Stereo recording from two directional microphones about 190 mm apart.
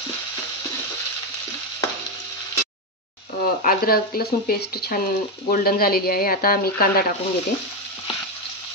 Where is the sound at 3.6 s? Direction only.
50° left (ahead or behind).